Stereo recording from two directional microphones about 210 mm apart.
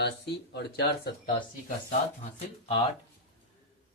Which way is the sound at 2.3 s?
30° left (ahead or behind).